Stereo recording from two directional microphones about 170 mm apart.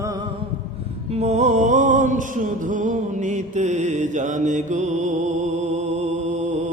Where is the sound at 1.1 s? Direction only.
40° right (ahead or behind).